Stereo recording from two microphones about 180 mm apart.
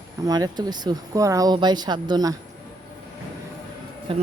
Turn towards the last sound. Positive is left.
turn(degrees=-30)  # may be behind; listen again after turning